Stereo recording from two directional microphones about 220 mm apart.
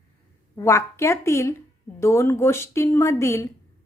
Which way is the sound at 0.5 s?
15° left (ahead or behind).